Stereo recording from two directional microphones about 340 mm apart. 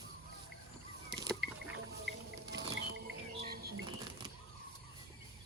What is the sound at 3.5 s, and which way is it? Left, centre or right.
Bird flight, right.